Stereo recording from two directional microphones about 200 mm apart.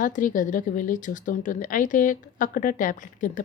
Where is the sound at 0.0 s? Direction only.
40° left (ahead or behind).